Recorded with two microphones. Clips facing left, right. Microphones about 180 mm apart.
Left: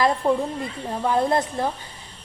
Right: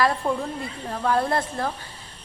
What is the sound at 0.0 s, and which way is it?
A woman's voice, 20° left (ahead or behind).